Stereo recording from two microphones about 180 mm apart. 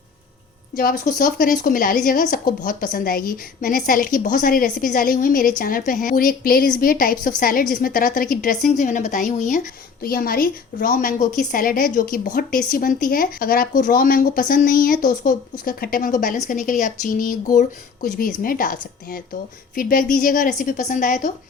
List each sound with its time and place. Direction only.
0.8 s speech: 50° left (ahead or behind)
10.0 s speech: 55° left (ahead or behind)